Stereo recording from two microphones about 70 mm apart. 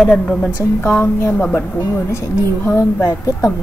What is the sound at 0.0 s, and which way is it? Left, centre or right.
Speech, centre.